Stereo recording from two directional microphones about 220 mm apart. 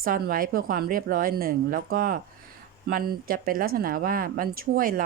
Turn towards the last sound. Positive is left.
turn(degrees=-40)  # may be behind; listen again after turning